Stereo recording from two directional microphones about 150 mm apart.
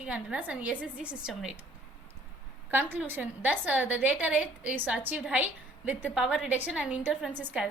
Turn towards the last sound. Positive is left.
turn(degrees=-10)  # may be behind; listen again after turning